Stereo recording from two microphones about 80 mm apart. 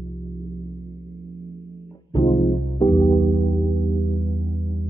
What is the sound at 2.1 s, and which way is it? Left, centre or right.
Music, left.